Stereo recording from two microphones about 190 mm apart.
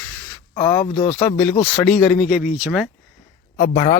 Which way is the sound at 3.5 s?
55° left (ahead or behind).